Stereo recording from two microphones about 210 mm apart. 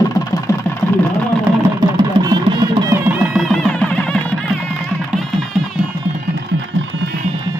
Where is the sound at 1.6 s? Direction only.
20° right (ahead or behind); by 5.6 s centre (ahead or behind).